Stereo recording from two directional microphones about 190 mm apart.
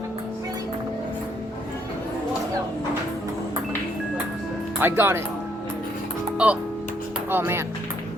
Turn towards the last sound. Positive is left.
turn(degrees=-10)  # may be behind; listen again after turning